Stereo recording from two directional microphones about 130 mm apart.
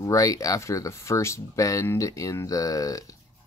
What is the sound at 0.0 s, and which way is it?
Speech, 25° left (ahead or behind).